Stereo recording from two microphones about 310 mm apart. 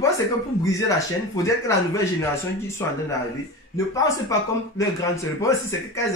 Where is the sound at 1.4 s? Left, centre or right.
Centre.